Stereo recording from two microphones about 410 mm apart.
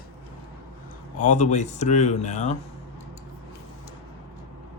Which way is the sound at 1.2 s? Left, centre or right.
Centre.